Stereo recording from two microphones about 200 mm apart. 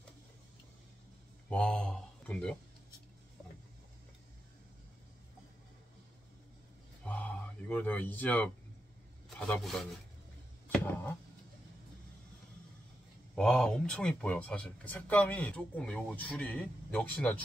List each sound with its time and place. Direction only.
1.5 s speech: 5° left (ahead or behind)
7.1 s a sound: 5° left (ahead or behind)
9.5 s speech: centre (ahead or behind)
13.3 s speech: 5° left (ahead or behind)